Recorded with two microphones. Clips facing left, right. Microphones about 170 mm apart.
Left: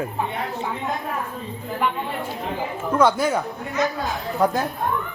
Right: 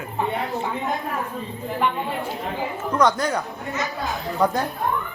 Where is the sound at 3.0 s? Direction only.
5° left (ahead or behind).